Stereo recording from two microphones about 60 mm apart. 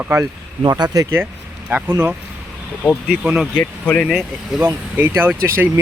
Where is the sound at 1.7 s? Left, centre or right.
Right.